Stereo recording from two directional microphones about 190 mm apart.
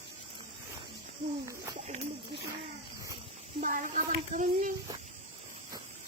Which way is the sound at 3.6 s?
45° right (ahead or behind).